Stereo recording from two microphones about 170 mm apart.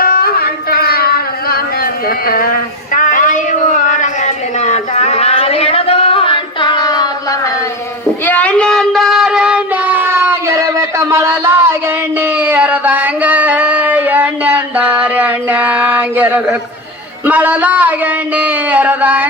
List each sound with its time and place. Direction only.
0.0 s a sound: 60° left (ahead or behind); by 7.5 s 20° left (ahead or behind)
8.2 s child singing: 10° left (ahead or behind); by 16.6 s 10° right (ahead or behind)
17.2 s speech: 10° right (ahead or behind)